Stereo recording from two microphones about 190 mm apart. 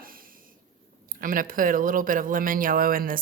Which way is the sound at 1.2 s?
45° right (ahead or behind).